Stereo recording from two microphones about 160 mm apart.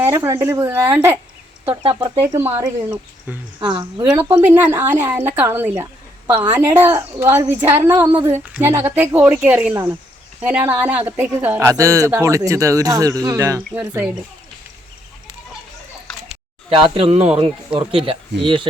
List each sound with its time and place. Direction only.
0.0 s speech: 20° right (ahead or behind)
1.7 s speech: 25° right (ahead or behind)
2.2 s speech: 20° right (ahead or behind)
3.6 s speech: 30° right (ahead or behind)
4.0 s speech: 10° right (ahead or behind)
5.8 s a sound: 15° right (ahead or behind)
6.5 s speech: 15° right (ahead or behind)
16.3 s a sound: 35° right (ahead or behind)
17.0 s speech: 40° right (ahead or behind)